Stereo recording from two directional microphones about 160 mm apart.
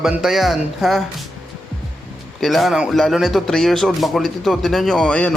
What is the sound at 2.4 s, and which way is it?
Speech, centre (ahead or behind).